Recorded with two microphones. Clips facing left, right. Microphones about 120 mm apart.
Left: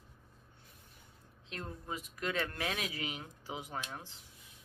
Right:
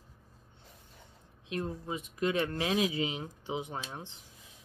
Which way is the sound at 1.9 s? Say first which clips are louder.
Right 5 dB; 20° right (ahead or behind).